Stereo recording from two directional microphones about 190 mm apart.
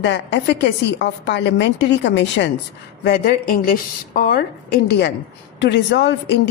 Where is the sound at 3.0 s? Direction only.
55° left (ahead or behind).